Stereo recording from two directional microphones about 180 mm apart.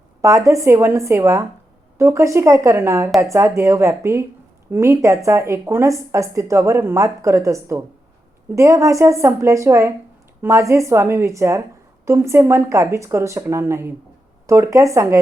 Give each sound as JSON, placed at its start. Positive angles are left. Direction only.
{"t": 0.2, "sound": "speech", "side_deg": -15}